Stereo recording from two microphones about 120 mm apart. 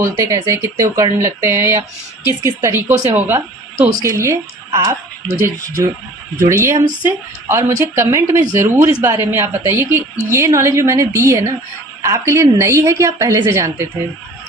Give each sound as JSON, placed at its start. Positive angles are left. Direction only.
{"t": 0.0, "sound": "a woman's voice", "side_deg": -25}